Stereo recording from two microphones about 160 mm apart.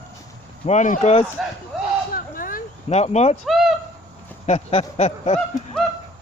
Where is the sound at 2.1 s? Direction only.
60° left (ahead or behind).